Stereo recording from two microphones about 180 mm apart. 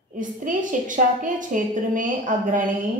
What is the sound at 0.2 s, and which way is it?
A woman's voice, 45° right (ahead or behind).